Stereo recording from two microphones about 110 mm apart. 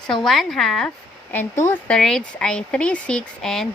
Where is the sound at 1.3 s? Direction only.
20° left (ahead or behind).